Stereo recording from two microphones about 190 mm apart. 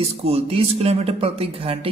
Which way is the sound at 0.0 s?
35° right (ahead or behind).